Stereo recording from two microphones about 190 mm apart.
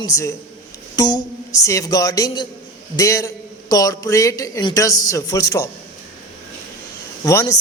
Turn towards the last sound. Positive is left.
turn(degrees=15)  # may be behind; listen again after turning